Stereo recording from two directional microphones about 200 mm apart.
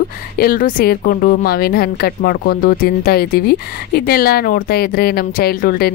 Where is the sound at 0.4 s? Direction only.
45° left (ahead or behind).